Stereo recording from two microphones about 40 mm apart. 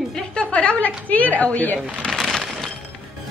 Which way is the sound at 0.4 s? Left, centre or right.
Left.